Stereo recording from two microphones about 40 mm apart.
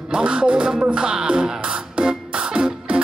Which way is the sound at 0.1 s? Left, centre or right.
Right.